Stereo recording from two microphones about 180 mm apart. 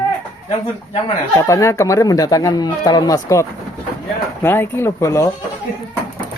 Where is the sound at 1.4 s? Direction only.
15° left (ahead or behind).